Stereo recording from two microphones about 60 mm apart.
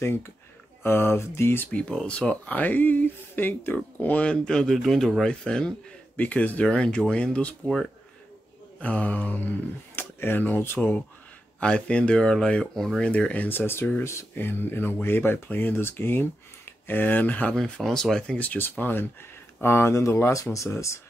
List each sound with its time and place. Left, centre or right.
0.0 s speech: left
1.7 s speech: left
4.3 s speech: centre
6.1 s speech: left
6.7 s speech: centre
8.7 s speech: left
11.6 s speech: centre
13.0 s speech: centre
17.8 s speech: centre
18.4 s speech: left
20.5 s speech: left